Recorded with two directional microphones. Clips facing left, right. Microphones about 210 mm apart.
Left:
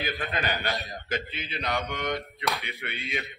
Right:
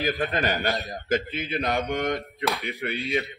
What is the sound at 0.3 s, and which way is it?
A man's voice, 45° right (ahead or behind).